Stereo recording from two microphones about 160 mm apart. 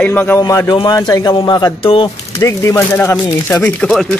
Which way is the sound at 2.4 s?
20° left (ahead or behind).